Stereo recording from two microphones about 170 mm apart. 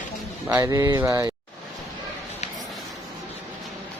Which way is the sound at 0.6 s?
20° right (ahead or behind).